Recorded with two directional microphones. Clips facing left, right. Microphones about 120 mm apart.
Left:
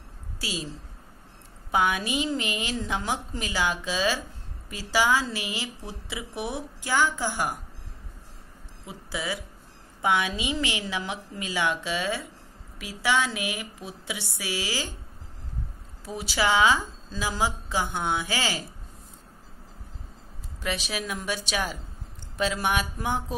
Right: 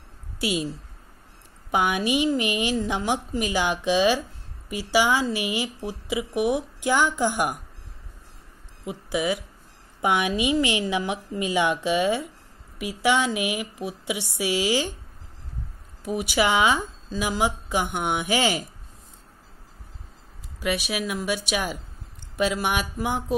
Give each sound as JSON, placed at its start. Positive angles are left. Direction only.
{"t": 0.4, "sound": "a woman's voice", "side_deg": -20}
{"t": 1.7, "sound": "speech", "side_deg": -20}
{"t": 8.8, "sound": "speech", "side_deg": -15}
{"t": 16.1, "sound": "speech", "side_deg": -15}
{"t": 20.6, "sound": "speech", "side_deg": -10}